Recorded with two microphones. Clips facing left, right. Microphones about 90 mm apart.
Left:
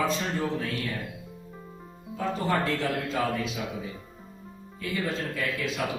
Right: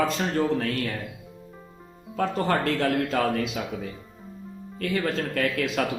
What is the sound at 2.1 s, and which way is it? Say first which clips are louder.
A man's voice: right 3 dB; 70° right (ahead or behind).